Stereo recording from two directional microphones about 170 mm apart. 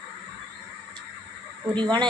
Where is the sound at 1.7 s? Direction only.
25° right (ahead or behind).